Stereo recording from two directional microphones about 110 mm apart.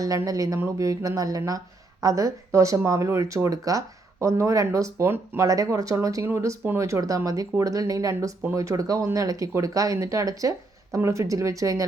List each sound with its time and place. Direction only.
0.3 s a woman's voice: 30° right (ahead or behind)
5.5 s a woman's voice: 30° right (ahead or behind)